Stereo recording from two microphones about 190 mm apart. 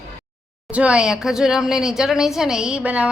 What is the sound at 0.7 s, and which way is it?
A woman's voice, 5° right (ahead or behind).